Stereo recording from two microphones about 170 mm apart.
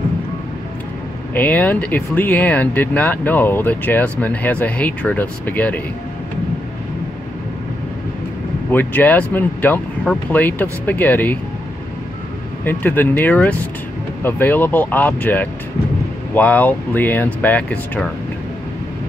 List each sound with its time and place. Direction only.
1.3 s speech: 10° left (ahead or behind)
8.7 s speech: 10° left (ahead or behind)
12.6 s speech: 10° left (ahead or behind)